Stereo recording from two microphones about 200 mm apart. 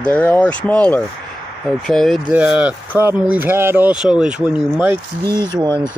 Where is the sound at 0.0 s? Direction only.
5° left (ahead or behind).